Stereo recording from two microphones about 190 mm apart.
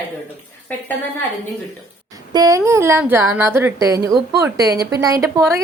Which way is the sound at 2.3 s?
20° right (ahead or behind).